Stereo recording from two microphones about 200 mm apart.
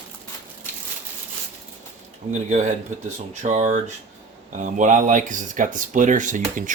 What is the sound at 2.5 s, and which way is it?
Speech, 35° right (ahead or behind).